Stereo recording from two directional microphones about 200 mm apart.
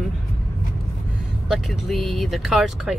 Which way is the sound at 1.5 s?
Centre (ahead or behind).